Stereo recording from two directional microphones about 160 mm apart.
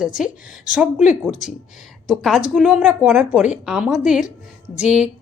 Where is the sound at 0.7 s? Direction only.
5° right (ahead or behind).